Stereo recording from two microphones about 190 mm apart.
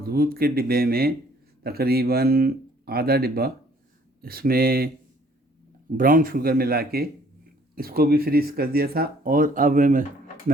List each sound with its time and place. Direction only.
0.0 s speech: 55° right (ahead or behind)
6.0 s speech: 45° right (ahead or behind)